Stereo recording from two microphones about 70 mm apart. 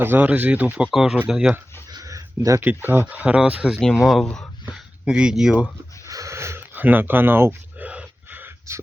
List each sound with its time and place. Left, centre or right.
0.0 s speech: right
0.9 s speech: centre
1.9 s a sound: right
2.6 s speech: right
3.1 s speech: centre
4.0 s speech: centre
4.7 s speech: centre
6.1 s snort: right
6.6 s speech: right
7.9 s a sound: right